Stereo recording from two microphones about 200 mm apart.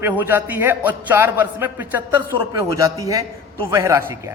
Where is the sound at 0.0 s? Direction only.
10° right (ahead or behind).